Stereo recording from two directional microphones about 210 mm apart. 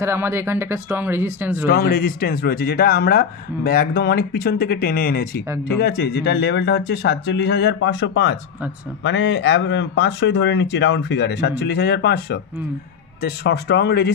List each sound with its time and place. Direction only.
0.0 s speech: 10° right (ahead or behind)
1.7 s a man's voice: 45° left (ahead or behind)